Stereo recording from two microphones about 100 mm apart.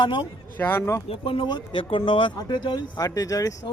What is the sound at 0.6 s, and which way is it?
Speech, 25° left (ahead or behind).